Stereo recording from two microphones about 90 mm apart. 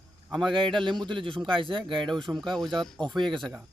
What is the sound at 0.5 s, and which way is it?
Speech, 60° right (ahead or behind).